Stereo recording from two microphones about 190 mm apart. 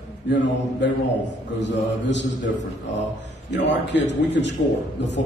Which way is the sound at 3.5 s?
65° left (ahead or behind).